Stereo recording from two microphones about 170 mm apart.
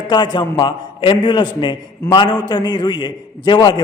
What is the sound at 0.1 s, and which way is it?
A man's voice, 25° left (ahead or behind).